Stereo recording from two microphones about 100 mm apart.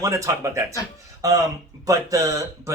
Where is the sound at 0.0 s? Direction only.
35° right (ahead or behind).